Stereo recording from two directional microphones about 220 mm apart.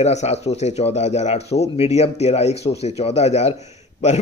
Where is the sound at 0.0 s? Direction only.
30° left (ahead or behind).